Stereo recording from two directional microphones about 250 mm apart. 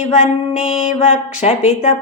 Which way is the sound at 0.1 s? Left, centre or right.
Left.